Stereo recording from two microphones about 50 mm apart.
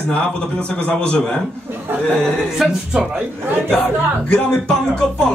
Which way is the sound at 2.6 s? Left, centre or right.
Centre.